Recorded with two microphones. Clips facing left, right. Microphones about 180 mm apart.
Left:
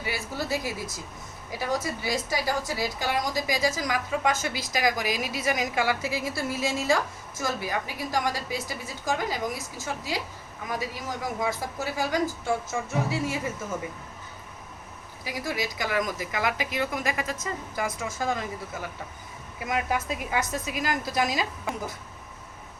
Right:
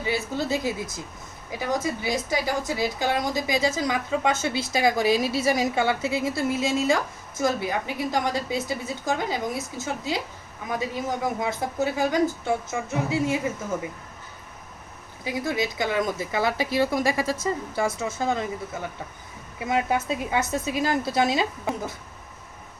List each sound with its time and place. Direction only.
0.0 s a woman's voice: 20° right (ahead or behind)
15.2 s a woman's voice: 25° right (ahead or behind)